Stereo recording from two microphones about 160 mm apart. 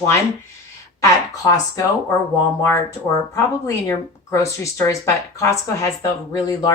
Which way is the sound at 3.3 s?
15° left (ahead or behind).